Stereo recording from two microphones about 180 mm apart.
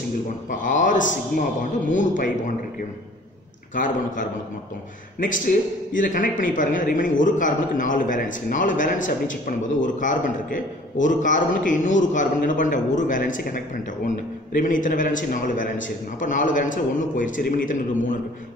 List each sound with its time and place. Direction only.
0.5 s a man's voice: 45° left (ahead or behind)
3.7 s a man's voice: 45° left (ahead or behind)
5.9 s a man's voice: 45° left (ahead or behind)